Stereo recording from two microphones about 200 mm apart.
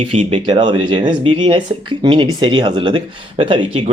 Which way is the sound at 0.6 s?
25° right (ahead or behind).